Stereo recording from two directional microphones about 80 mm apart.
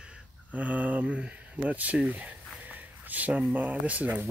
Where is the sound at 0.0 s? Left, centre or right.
Centre.